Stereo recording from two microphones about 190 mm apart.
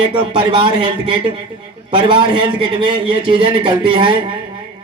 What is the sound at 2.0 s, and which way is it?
Speech, 25° right (ahead or behind).